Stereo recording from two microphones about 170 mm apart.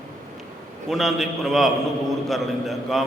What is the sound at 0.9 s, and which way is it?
A man's voice, centre (ahead or behind).